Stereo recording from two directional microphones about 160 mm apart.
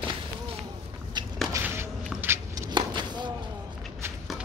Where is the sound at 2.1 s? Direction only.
10° right (ahead or behind).